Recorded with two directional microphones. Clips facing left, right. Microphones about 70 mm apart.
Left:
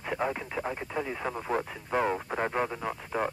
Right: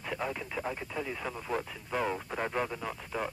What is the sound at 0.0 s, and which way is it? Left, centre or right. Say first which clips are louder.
Speech: left 4 dB; left.